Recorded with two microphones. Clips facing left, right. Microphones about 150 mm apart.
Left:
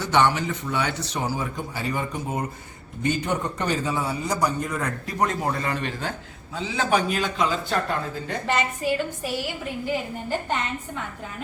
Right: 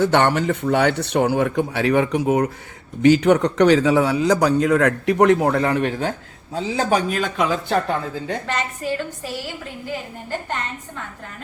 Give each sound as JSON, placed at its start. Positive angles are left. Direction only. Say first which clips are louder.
{"t": 0.0, "sound": "a man's voice", "louder": "right 4 dB", "side_deg": -60}
{"t": 6.5, "sound": "speech", "louder": "right 4 dB", "side_deg": -40}
{"t": 8.4, "sound": "a woman's voice", "louder": "left 1 dB", "side_deg": 10}